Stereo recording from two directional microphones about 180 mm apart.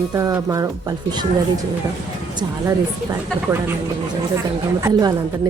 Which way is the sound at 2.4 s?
20° right (ahead or behind).